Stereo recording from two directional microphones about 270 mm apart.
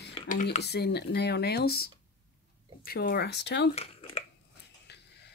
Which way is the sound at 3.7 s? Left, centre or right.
Left.